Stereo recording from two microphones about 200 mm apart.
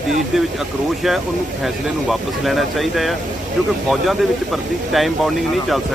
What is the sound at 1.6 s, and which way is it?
Speech, centre (ahead or behind).